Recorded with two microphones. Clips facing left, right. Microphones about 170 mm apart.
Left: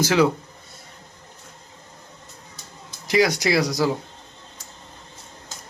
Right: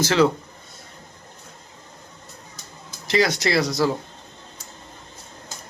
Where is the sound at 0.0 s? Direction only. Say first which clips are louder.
Even; 10° left (ahead or behind).